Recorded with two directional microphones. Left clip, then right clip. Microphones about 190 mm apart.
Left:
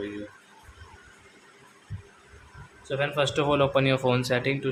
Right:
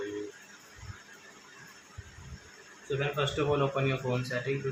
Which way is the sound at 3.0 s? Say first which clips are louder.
Left 6 dB; 45° left (ahead or behind).